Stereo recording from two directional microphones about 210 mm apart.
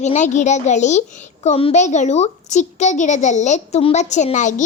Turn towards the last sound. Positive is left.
turn(degrees=35)  # may be behind; listen again after turning